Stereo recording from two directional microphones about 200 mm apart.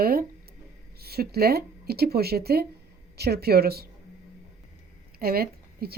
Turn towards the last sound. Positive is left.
turn(degrees=-50)  # may be behind; listen again after turning